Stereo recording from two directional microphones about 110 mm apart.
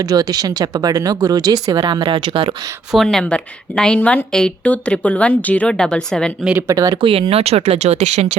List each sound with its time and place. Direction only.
0.0 s speech: 35° right (ahead or behind)
1.8 s speech: 45° right (ahead or behind)
2.9 s a woman's voice: 5° left (ahead or behind)
6.6 s speech: 30° right (ahead or behind)
7.0 s speech: 55° right (ahead or behind); by 8.3 s 90° right